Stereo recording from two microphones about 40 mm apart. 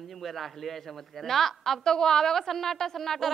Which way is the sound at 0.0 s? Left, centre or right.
Centre.